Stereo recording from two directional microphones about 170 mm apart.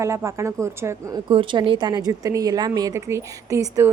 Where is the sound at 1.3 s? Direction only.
30° right (ahead or behind).